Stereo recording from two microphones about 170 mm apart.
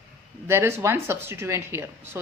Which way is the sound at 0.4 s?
15° right (ahead or behind).